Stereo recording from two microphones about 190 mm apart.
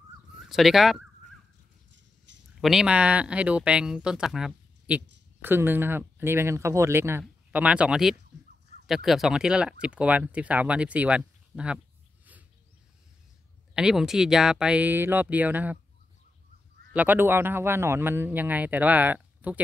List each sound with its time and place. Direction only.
0.5 s speech: centre (ahead or behind)
1.9 s a sound: 70° right (ahead or behind)
2.6 s speech: 5° right (ahead or behind)
13.7 s speech: 5° right (ahead or behind)
16.9 s speech: 10° right (ahead or behind)